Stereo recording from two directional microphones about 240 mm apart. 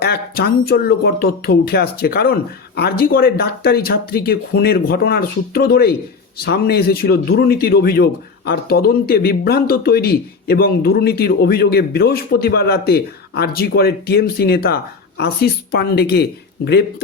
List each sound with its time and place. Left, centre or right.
0.0 s speech: left